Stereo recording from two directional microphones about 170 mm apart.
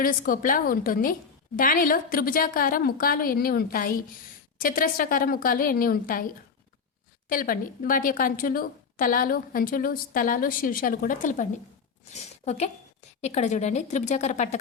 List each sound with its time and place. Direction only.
0.0 s a woman's voice: 55° left (ahead or behind)
7.3 s a woman's voice: 55° left (ahead or behind)